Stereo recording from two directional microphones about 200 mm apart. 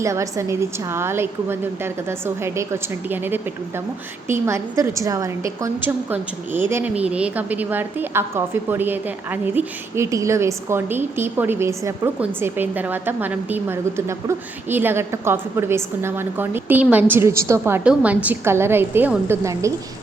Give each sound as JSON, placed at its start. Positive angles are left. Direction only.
{"t": 0.0, "sound": "a woman's voice", "side_deg": -15}